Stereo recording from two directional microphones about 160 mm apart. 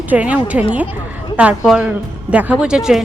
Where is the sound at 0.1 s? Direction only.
10° right (ahead or behind).